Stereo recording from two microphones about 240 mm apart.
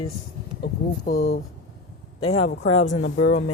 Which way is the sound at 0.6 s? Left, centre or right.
Left.